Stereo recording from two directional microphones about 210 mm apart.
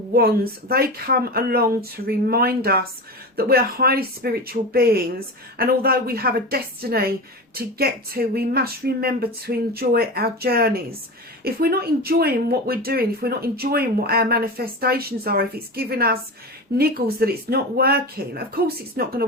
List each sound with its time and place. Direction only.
0.1 s speech: 45° right (ahead or behind)